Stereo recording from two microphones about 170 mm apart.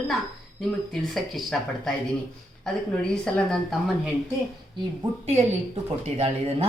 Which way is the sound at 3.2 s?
5° left (ahead or behind).